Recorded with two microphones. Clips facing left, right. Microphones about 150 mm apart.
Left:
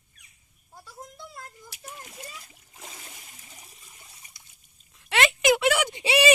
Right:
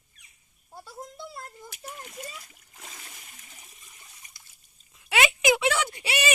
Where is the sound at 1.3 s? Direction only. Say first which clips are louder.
Right 2 dB; 25° right (ahead or behind).